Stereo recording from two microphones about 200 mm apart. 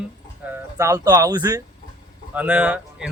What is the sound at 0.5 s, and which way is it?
Speech, 15° right (ahead or behind).